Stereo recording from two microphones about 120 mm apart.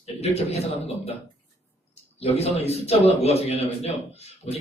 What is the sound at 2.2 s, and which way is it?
Speech, 55° left (ahead or behind).